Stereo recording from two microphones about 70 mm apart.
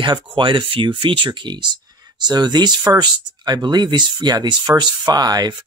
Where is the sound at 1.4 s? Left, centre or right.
Right.